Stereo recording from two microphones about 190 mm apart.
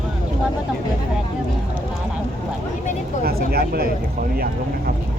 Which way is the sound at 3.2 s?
55° right (ahead or behind).